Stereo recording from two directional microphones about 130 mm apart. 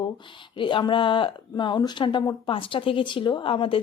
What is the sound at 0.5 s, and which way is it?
A woman's voice, 40° left (ahead or behind).